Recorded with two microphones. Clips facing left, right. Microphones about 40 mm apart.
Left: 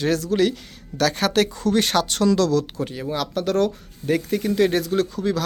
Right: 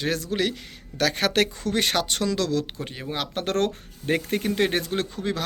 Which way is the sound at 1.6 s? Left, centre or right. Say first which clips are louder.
Left 4 dB; centre.